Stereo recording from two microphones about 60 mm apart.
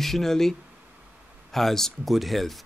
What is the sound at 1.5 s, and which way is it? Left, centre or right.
Speech, centre.